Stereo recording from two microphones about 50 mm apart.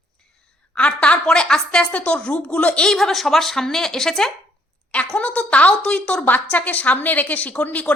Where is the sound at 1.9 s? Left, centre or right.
Left.